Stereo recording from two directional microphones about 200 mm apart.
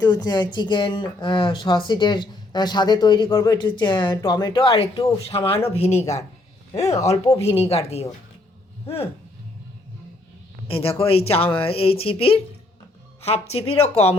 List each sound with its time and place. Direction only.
0.0 s speech: 20° left (ahead or behind)
6.8 s speech: 15° left (ahead or behind)
7.4 s speech: 30° left (ahead or behind)
10.7 s speech: 30° left (ahead or behind)